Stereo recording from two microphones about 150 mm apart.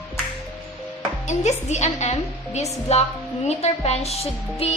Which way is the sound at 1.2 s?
50° left (ahead or behind).